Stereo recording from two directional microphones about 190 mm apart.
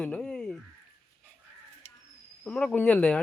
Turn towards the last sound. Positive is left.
turn(degrees=5)  # may be behind; listen again after turning